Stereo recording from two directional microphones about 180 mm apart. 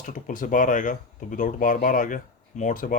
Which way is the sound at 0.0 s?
45° left (ahead or behind).